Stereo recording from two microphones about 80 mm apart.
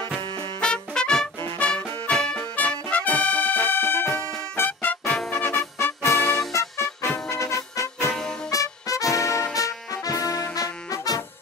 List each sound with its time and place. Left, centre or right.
0.6 s music: centre; by 5.9 s left
6.0 s music: centre
6.5 s music: left